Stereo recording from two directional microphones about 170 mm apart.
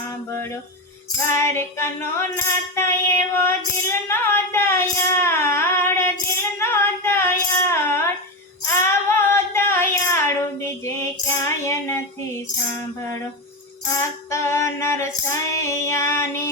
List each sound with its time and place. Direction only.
1.3 s female singing: 15° left (ahead or behind)
8.7 s music: 15° left (ahead or behind)
10.6 s female singing: 15° left (ahead or behind)
14.3 s female singing: 15° left (ahead or behind)